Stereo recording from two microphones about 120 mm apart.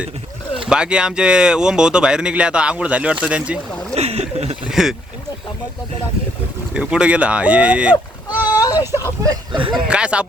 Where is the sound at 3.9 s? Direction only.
60° right (ahead or behind).